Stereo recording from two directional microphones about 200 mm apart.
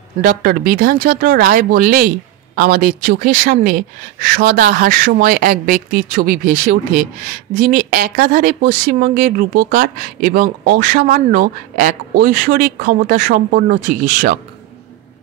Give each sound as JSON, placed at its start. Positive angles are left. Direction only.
{"t": 0.2, "sound": "speech", "side_deg": -45}